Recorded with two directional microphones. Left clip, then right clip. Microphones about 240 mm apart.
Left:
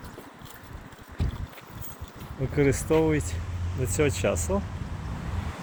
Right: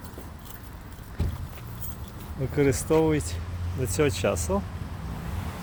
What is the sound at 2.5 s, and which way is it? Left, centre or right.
Speech, centre.